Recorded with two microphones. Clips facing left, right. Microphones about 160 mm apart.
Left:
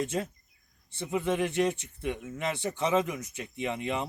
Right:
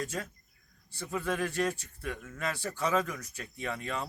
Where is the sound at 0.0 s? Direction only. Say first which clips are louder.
Left 5 dB; 25° left (ahead or behind).